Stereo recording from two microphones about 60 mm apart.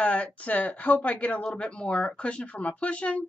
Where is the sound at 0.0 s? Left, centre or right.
Left.